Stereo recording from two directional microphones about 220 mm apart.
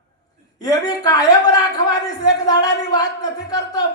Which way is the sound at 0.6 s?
15° left (ahead or behind).